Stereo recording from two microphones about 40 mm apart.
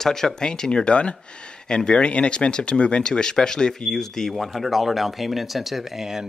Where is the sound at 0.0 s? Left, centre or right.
Centre.